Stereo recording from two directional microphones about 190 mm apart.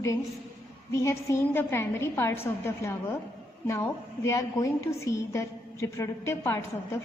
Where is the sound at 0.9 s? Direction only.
15° left (ahead or behind).